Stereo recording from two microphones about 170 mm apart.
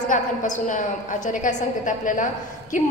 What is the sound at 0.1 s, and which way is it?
A woman's voice, 50° left (ahead or behind).